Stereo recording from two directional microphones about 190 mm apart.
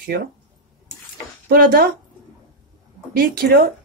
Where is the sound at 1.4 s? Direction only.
50° right (ahead or behind).